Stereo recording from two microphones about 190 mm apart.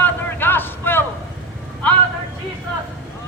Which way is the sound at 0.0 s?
10° left (ahead or behind).